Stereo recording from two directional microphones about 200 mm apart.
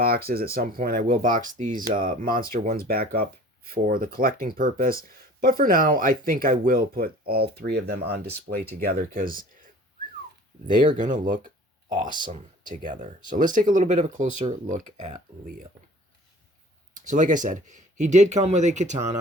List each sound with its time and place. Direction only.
0.0 s speech: 50° right (ahead or behind)
10.7 s speech: 40° right (ahead or behind)
16.9 s speech: 40° right (ahead or behind)